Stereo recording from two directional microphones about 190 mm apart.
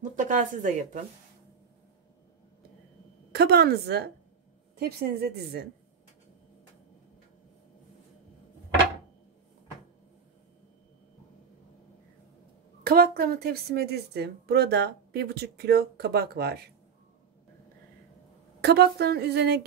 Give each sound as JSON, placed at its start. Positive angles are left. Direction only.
{"t": 0.1, "sound": "speech", "side_deg": -40}
{"t": 3.3, "sound": "a woman's voice", "side_deg": -55}
{"t": 12.8, "sound": "a woman's voice", "side_deg": -50}
{"t": 18.6, "sound": "a woman's voice", "side_deg": -60}